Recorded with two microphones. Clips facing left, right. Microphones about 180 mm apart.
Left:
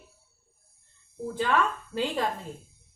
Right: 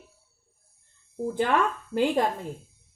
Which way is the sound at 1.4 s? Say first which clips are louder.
Right 1 dB; 55° right (ahead or behind).